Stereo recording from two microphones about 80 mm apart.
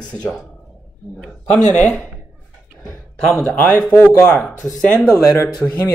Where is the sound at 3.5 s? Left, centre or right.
Centre.